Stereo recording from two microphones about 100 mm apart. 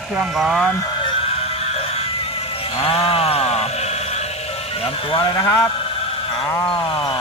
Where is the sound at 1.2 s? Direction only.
90° left.